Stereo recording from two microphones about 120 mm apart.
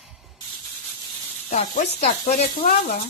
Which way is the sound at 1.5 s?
65° left (ahead or behind).